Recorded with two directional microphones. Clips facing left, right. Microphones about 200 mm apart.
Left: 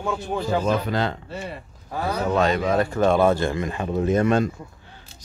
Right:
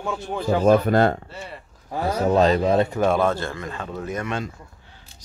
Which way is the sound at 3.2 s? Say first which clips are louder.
Left 3 dB; 15° left (ahead or behind).